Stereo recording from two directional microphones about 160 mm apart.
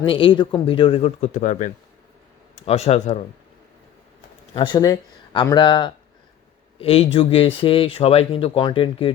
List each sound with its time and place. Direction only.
0.0 s speech: 35° left (ahead or behind); by 1.7 s 50° left (ahead or behind)
2.6 s speech: 40° left (ahead or behind)
4.5 s speech: 30° left (ahead or behind)